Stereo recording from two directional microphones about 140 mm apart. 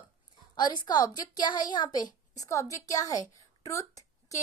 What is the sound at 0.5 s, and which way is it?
A woman's voice, 30° left (ahead or behind).